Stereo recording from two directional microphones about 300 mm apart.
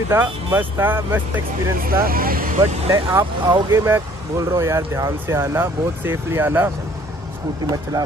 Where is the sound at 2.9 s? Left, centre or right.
Centre.